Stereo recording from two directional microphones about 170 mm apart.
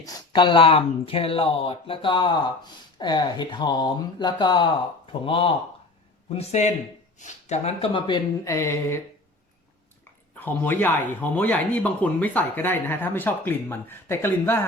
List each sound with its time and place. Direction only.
0.0 s speech: 30° left (ahead or behind)
6.3 s speech: 40° left (ahead or behind); by 9.0 s 15° left (ahead or behind)
10.0 s speech: 10° left (ahead or behind)